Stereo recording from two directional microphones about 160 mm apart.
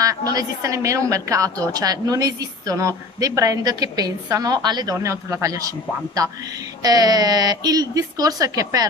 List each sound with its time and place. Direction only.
0.0 s a woman's voice: 25° right (ahead or behind)
6.8 s a woman's voice: 25° right (ahead or behind)